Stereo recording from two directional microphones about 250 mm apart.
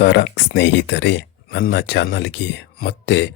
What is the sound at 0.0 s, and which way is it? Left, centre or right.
Speech, left.